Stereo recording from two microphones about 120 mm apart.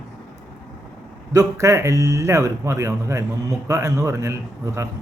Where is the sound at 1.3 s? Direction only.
25° right (ahead or behind).